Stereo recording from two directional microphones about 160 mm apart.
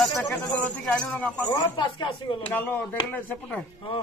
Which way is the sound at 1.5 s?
30° left (ahead or behind).